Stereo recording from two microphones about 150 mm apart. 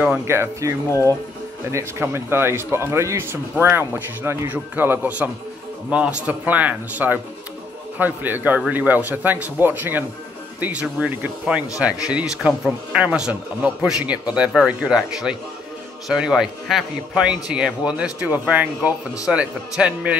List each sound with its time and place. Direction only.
0.3 s speech: 20° right (ahead or behind)
0.8 s speech: 20° left (ahead or behind)
1.7 s speech: 15° right (ahead or behind)